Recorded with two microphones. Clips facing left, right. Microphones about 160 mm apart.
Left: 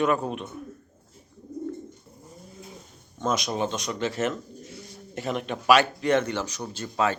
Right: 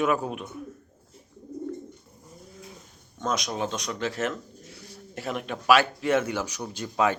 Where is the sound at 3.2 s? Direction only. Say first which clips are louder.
Left 2 dB; centre (ahead or behind).